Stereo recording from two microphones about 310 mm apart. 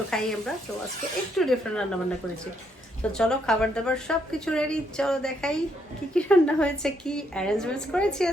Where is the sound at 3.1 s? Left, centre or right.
Centre.